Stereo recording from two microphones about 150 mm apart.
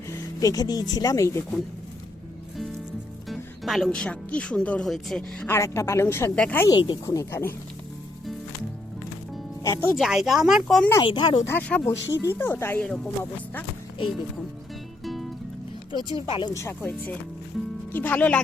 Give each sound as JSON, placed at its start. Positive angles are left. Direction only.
{"t": 0.1, "sound": "speech", "side_deg": 25}
{"t": 3.2, "sound": "speech", "side_deg": 0}
{"t": 5.5, "sound": "speech", "side_deg": 20}
{"t": 6.7, "sound": "speech", "side_deg": 30}
{"t": 9.6, "sound": "speech", "side_deg": 20}
{"t": 10.0, "sound": "speech", "side_deg": 0}
{"t": 11.0, "sound": "speech", "side_deg": 30}
{"t": 11.4, "sound": "speech", "side_deg": 10}
{"t": 15.0, "sound": "music", "side_deg": 0}
{"t": 16.1, "sound": "speech", "side_deg": 30}
{"t": 16.6, "sound": "speech", "side_deg": 15}